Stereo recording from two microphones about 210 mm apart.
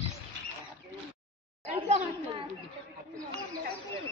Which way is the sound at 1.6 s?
30° right (ahead or behind).